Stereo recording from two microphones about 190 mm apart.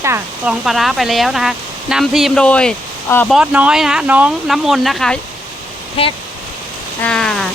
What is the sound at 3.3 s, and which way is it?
Speech, 5° right (ahead or behind).